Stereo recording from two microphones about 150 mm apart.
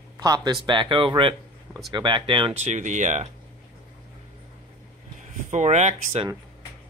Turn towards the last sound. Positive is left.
turn(degrees=-45)  # may be behind; listen again after turning